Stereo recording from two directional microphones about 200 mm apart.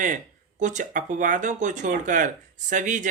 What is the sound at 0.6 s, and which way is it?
Speech, 40° right (ahead or behind).